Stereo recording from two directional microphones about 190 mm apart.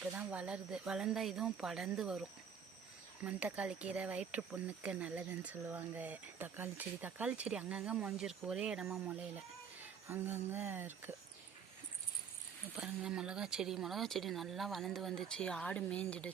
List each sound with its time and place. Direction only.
0.0 s speech: 5° right (ahead or behind)
3.2 s speech: 5° right (ahead or behind)
12.7 s speech: 5° right (ahead or behind)